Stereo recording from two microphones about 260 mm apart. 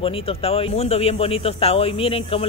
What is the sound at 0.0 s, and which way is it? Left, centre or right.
Speech, left.